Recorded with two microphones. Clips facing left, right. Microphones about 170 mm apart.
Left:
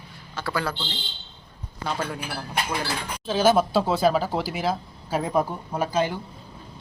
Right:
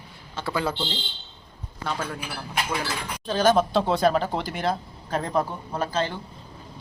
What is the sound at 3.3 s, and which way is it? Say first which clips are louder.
Speech: left 1 dB; 5° left (ahead or behind).